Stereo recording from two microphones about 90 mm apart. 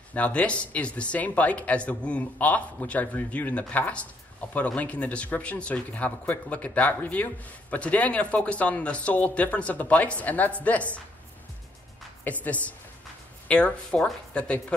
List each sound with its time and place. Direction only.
0.1 s speech: 15° left (ahead or behind)
12.3 s speech: 15° left (ahead or behind)